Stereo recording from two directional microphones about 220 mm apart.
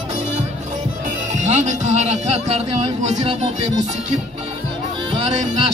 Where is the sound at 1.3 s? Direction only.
30° right (ahead or behind).